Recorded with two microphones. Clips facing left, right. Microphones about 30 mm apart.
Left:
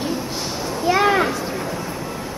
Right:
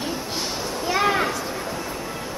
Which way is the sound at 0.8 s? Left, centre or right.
Centre.